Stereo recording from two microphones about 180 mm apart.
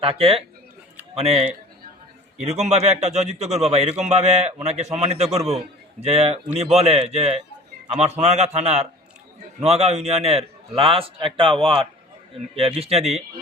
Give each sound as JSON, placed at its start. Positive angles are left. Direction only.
{"t": 0.0, "sound": "a man's voice", "side_deg": -30}
{"t": 12.8, "sound": "a man's voice", "side_deg": -35}